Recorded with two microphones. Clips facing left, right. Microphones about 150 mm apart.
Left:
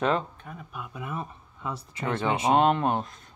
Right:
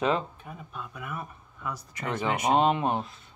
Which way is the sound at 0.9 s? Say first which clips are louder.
Left 5 dB; 25° left (ahead or behind).